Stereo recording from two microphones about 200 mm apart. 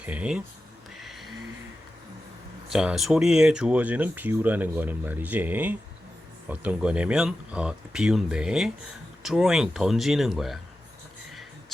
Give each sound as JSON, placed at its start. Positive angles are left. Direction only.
{"t": 0.0, "sound": "speech", "side_deg": -5}
{"t": 0.9, "sound": "music", "side_deg": 0}
{"t": 2.6, "sound": "speech", "side_deg": 0}